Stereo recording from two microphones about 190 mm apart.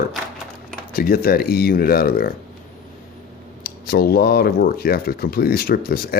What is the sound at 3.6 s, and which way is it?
Speech, 55° left (ahead or behind).